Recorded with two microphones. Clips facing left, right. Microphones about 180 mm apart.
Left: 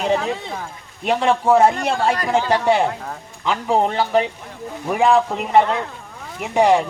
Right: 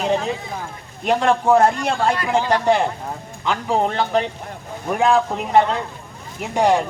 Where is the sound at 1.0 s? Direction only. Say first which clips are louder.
Even; centre (ahead or behind).